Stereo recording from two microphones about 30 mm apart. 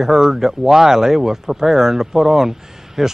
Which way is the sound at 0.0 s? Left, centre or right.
Centre.